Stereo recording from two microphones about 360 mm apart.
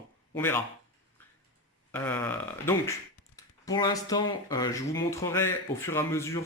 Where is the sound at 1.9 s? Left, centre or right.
Centre.